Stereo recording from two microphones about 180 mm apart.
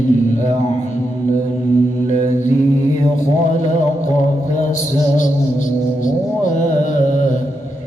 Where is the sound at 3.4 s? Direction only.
40° left (ahead or behind).